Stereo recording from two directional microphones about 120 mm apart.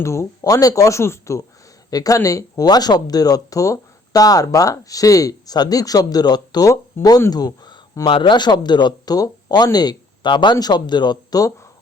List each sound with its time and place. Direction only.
0.0 s speech: 25° left (ahead or behind)